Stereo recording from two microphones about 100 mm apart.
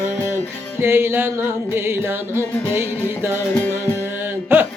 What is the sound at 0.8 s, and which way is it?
Music, 25° right (ahead or behind).